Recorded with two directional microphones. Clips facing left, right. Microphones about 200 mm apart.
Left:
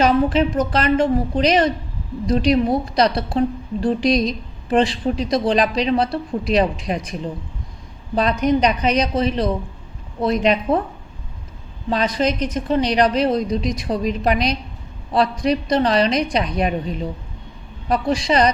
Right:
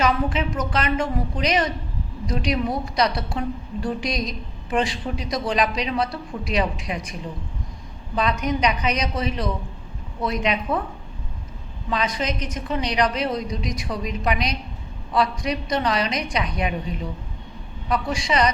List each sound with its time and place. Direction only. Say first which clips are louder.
0.0 s a woman's voice: left 6 dB; 35° left (ahead or behind)
8.1 s a woman's voice: left 6 dB; 35° left (ahead or behind)
11.9 s a woman's voice: left 6 dB; 35° left (ahead or behind)
17.8 s a woman's voice: left 5 dB; 35° left (ahead or behind)